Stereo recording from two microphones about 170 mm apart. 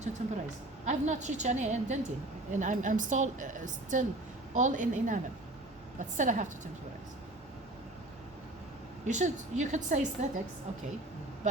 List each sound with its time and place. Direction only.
0.2 s a woman's voice: 40° right (ahead or behind)
9.0 s a woman's voice: 45° right (ahead or behind)